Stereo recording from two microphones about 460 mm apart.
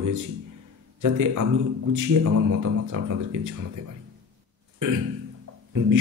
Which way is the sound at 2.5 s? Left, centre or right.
Right.